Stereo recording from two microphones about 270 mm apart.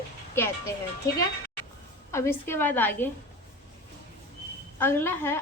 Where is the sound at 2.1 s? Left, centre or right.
Centre.